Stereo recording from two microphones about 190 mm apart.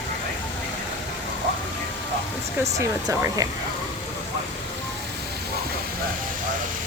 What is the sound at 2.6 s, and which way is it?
Speech, 15° right (ahead or behind).